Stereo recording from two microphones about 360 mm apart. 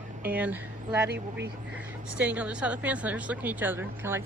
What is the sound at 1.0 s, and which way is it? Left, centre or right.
Speech, right.